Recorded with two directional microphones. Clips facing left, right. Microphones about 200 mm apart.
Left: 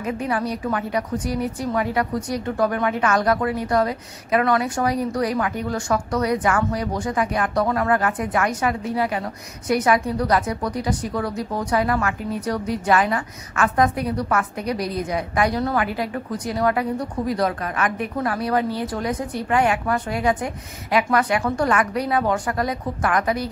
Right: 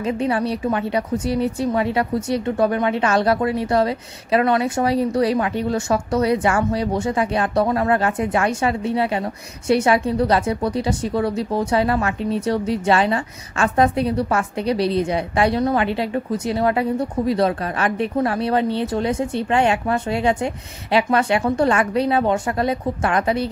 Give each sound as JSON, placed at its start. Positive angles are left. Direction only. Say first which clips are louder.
{"t": 0.0, "sound": "a woman's voice", "louder": "right 4 dB", "side_deg": -25}